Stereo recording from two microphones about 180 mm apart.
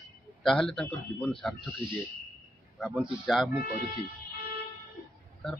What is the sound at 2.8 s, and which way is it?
Speech, 5° right (ahead or behind).